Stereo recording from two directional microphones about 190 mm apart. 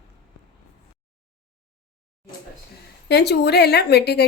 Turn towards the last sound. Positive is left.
turn(degrees=60)  # may be behind; listen again after turning